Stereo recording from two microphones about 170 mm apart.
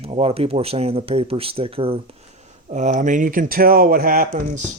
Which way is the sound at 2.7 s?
45° right (ahead or behind).